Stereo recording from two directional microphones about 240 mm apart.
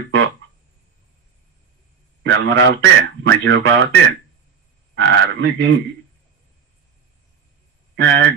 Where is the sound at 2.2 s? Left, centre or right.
Right.